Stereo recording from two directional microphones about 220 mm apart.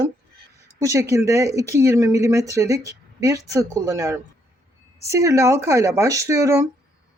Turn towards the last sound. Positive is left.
turn(degrees=-15)  # may be behind; listen again after turning